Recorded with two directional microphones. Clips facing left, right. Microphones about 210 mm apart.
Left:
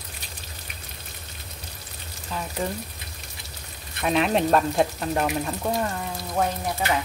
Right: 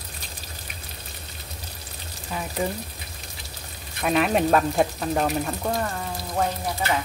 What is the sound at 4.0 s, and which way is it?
Speech, centre (ahead or behind).